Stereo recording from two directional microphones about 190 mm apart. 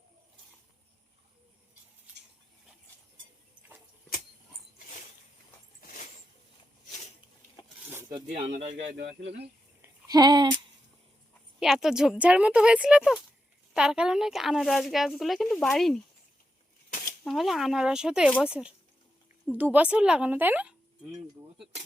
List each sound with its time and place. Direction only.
8.5 s speech: 40° right (ahead or behind)
9.0 s speech: 60° right (ahead or behind)
9.8 s a sound: 20° right (ahead or behind)
11.6 s speech: centre (ahead or behind)
17.2 s speech: centre (ahead or behind)